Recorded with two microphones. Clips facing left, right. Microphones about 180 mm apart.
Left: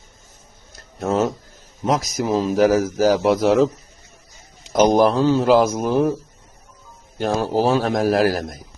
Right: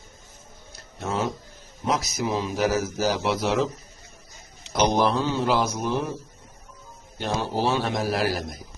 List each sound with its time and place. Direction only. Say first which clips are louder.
0.7 s a sound: left 8 dB; 45° left (ahead or behind)
1.8 s a man's voice: left 5 dB; 45° left (ahead or behind)
4.7 s a man's voice: left 7 dB; 45° left (ahead or behind)
5.4 s a man's voice: left 8 dB; centre (ahead or behind)
7.2 s a man's voice: left 7 dB; 45° left (ahead or behind)